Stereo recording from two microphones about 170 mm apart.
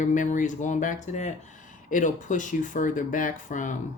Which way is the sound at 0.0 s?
50° left (ahead or behind).